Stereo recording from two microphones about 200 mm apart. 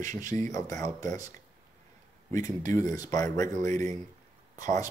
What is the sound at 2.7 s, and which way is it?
Speech, 15° left (ahead or behind).